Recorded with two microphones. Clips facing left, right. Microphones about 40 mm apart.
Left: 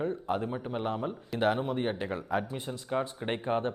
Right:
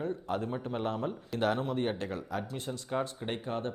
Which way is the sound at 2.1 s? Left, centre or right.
Left.